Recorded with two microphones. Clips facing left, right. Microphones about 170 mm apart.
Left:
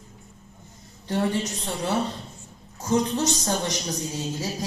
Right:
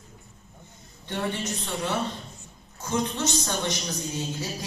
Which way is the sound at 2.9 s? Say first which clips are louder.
Left 4 dB; 40° left (ahead or behind).